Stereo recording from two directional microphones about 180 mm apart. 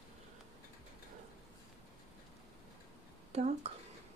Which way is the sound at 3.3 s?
35° right (ahead or behind).